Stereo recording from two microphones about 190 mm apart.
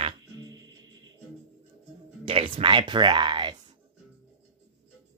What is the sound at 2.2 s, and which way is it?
Speech, 30° right (ahead or behind).